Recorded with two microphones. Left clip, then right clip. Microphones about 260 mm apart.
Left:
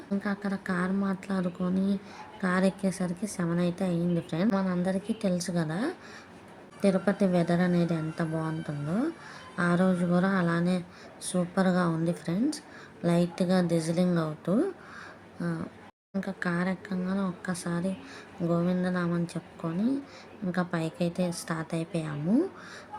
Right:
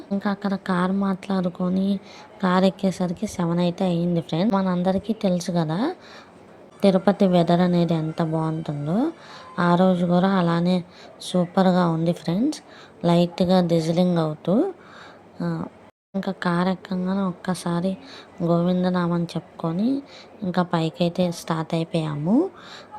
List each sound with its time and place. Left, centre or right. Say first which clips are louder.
0.2 s speech: right 8 dB; centre